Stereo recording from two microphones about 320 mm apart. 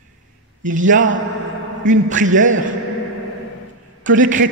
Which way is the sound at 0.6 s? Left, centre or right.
Right.